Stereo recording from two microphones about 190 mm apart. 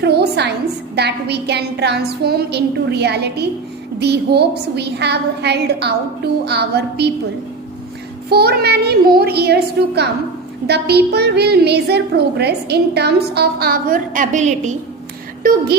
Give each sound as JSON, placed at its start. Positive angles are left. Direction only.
{"t": 0.0, "sound": "a sound", "side_deg": -60}
{"t": 0.9, "sound": "a woman's voice", "side_deg": -60}
{"t": 8.3, "sound": "a woman's voice", "side_deg": -55}